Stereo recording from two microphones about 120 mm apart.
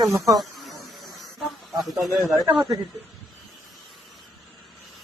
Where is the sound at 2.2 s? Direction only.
5° right (ahead or behind).